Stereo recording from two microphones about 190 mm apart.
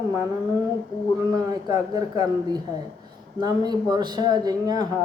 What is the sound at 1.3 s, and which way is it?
A man's voice, 20° right (ahead or behind).